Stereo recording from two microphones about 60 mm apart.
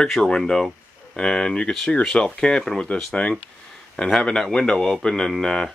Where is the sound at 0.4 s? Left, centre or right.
Centre.